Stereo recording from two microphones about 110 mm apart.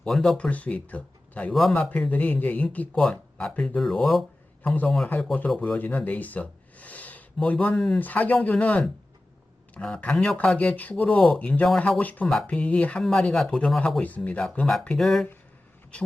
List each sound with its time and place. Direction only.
0.0 s speech: 5° left (ahead or behind)
4.6 s speech: 15° left (ahead or behind)